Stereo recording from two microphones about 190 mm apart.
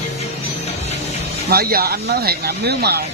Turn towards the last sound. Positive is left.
turn(degrees=-60)  # may be behind; listen again after turning